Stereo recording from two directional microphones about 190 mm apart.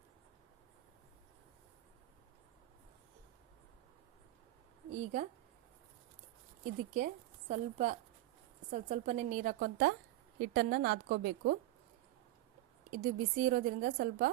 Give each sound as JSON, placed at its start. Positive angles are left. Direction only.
{"t": 4.9, "sound": "speech", "side_deg": -40}
{"t": 6.9, "sound": "a woman's voice", "side_deg": -40}
{"t": 12.9, "sound": "a woman's voice", "side_deg": -45}